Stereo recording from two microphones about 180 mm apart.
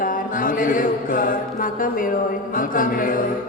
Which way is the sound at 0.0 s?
50° left (ahead or behind).